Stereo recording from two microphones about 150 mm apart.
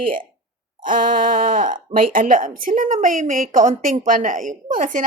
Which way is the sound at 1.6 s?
65° right (ahead or behind).